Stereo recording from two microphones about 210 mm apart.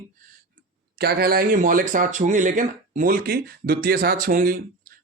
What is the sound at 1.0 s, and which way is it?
Speech, 45° right (ahead or behind).